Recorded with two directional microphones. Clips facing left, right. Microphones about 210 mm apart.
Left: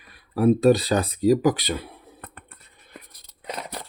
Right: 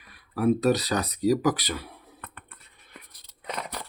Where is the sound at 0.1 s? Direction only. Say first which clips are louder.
Left 4 dB; 30° left (ahead or behind).